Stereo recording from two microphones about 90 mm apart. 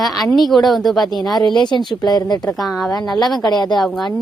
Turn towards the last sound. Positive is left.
turn(degrees=0)  # may be behind; listen again after turning